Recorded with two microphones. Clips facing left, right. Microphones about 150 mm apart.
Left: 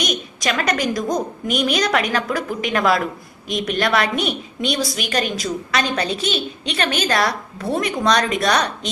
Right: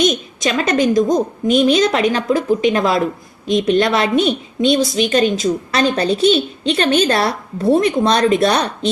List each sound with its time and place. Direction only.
0.0 s a woman's voice: 25° right (ahead or behind)